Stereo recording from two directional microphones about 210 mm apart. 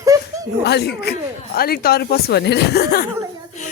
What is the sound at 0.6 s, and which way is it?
A woman's voice, 50° left (ahead or behind).